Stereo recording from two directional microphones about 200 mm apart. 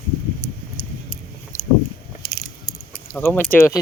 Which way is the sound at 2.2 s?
5° right (ahead or behind).